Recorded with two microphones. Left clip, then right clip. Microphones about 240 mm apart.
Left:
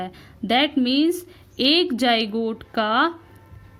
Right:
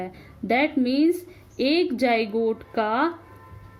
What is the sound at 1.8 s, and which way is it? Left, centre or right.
Speech, left.